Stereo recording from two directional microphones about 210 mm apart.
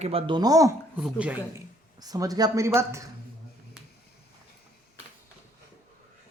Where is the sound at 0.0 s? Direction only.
25° right (ahead or behind).